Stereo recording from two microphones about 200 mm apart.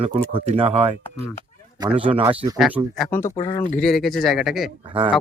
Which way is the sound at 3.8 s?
Centre (ahead or behind).